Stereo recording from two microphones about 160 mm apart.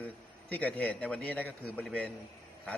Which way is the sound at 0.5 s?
10° left (ahead or behind).